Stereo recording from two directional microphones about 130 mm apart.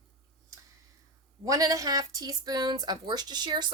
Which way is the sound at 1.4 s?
25° right (ahead or behind).